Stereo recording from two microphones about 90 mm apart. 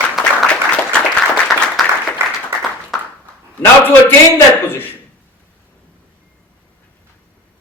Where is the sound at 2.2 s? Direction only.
30° right (ahead or behind).